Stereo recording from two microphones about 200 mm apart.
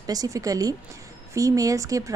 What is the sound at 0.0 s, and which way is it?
A woman's voice, 20° right (ahead or behind).